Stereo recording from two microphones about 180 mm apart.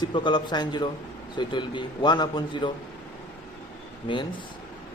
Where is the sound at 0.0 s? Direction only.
25° left (ahead or behind).